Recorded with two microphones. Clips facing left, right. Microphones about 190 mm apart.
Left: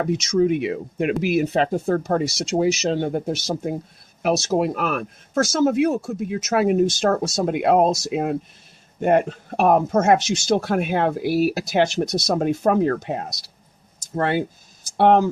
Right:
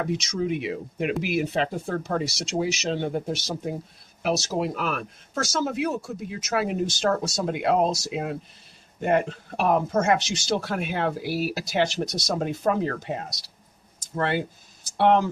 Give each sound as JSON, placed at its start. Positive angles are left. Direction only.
{"t": 0.0, "sound": "speech", "side_deg": 45}
{"t": 9.6, "sound": "speech", "side_deg": 50}
{"t": 14.9, "sound": "speech", "side_deg": 50}